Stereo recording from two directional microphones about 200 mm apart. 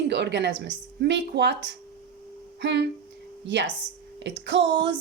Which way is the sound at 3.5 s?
60° right (ahead or behind).